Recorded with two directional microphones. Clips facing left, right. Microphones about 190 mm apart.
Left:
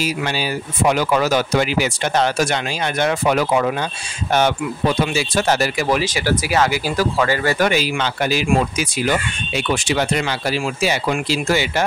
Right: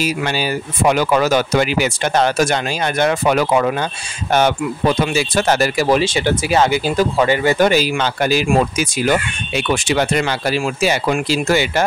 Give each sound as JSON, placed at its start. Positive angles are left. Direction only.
{"t": 0.0, "sound": "speech", "side_deg": -55}
{"t": 4.3, "sound": "speech", "side_deg": -50}
{"t": 5.8, "sound": "speech", "side_deg": -30}
{"t": 7.7, "sound": "speech", "side_deg": -45}